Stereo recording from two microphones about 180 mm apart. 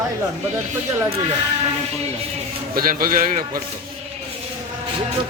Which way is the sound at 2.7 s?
50° right (ahead or behind).